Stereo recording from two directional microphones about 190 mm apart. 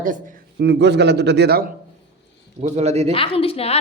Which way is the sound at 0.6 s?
65° right (ahead or behind).